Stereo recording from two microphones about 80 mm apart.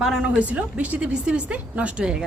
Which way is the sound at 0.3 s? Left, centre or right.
Centre.